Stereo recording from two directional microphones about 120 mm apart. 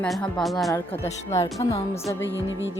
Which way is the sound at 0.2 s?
5° left (ahead or behind).